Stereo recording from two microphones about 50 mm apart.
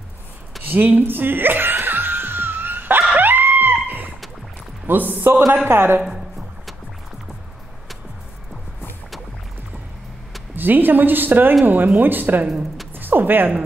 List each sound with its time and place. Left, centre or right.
0.7 s music: right
3.2 s a sound: right
4.8 s a woman's voice: right
5.7 s a woman's voice: right
10.5 s a woman's voice: right
12.9 s a sound: right